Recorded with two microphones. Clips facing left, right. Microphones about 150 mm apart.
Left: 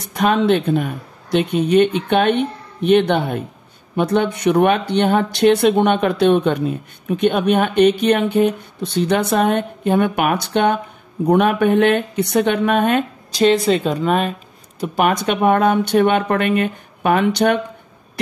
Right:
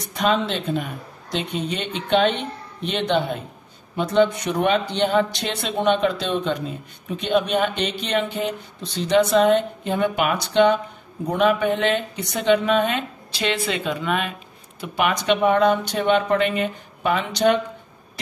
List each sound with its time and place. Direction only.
0.1 s speech: 60° left (ahead or behind)